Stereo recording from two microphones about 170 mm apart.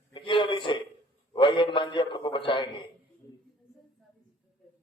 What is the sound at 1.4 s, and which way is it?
A man's voice, 30° left (ahead or behind).